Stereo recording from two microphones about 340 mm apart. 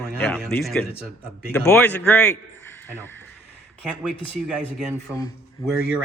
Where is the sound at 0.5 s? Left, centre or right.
Centre.